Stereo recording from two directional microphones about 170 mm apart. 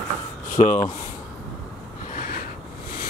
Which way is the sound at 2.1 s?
50° left (ahead or behind).